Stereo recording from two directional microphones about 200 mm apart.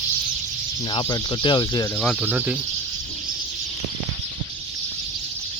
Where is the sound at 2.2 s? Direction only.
10° right (ahead or behind).